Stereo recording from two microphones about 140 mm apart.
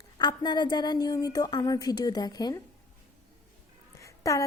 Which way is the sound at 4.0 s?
20° left (ahead or behind).